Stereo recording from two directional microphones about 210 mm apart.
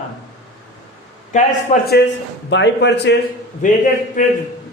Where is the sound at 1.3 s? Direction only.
35° left (ahead or behind).